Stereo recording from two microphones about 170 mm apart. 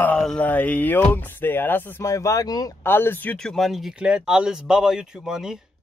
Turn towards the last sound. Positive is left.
turn(degrees=-5)  # may be behind; listen again after turning